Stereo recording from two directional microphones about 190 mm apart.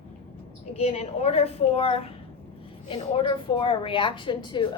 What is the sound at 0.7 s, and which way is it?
A woman's voice, 35° left (ahead or behind).